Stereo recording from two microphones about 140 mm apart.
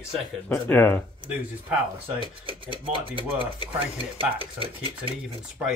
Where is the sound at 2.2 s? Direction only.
35° right (ahead or behind).